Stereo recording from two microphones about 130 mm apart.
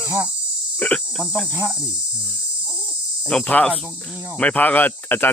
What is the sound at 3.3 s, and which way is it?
Speech, 10° left (ahead or behind).